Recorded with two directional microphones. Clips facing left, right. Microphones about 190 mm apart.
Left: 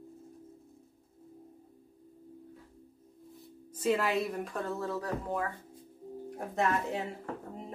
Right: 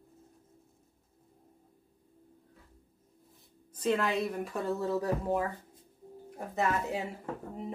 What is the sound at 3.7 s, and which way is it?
A woman's voice, 5° left (ahead or behind).